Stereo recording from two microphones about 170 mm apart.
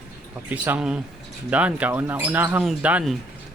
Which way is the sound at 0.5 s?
10° right (ahead or behind).